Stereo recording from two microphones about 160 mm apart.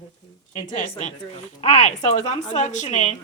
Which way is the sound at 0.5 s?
50° left (ahead or behind).